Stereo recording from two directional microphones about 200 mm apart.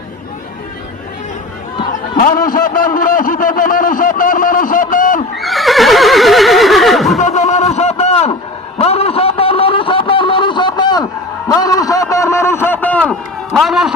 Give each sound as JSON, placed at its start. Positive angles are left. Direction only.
{"t": 1.9, "sound": "a man's voice", "side_deg": 45}
{"t": 5.4, "sound": "neigh", "side_deg": 0}
{"t": 7.2, "sound": "a sound", "side_deg": 35}
{"t": 11.4, "sound": "a man's voice", "side_deg": 20}